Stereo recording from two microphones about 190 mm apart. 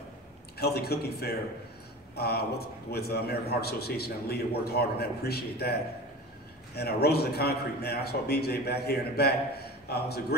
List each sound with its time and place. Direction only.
0.6 s a man's voice: 55° left (ahead or behind)